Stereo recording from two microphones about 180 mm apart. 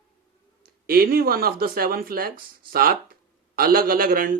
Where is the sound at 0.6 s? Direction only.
55° right (ahead or behind).